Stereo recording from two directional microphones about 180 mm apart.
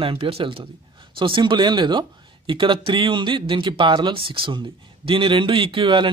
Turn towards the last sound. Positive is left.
turn(degrees=-25)  # may be behind; listen again after turning